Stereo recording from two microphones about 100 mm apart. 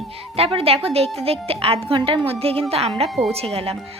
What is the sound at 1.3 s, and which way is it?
A woman's voice, 75° right (ahead or behind).